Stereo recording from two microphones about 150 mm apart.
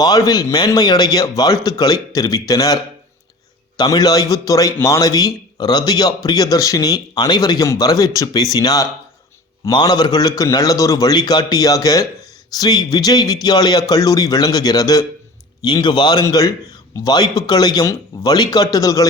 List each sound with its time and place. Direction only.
0.0 s speech: 25° left (ahead or behind)
3.8 s speech: 25° left (ahead or behind)